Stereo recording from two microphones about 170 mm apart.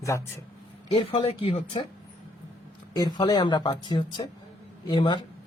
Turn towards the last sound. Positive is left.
turn(degrees=25)  # may be behind; listen again after turning